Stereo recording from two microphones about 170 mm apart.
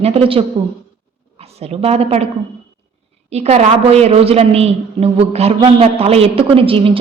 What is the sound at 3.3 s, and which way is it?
A man's voice, 40° right (ahead or behind).